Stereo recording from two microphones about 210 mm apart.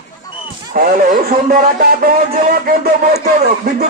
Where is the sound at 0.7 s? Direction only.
45° right (ahead or behind).